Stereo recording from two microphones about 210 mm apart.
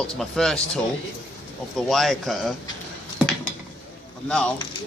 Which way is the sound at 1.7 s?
Centre (ahead or behind).